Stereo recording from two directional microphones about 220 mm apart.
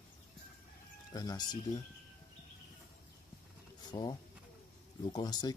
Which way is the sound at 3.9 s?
20° left (ahead or behind).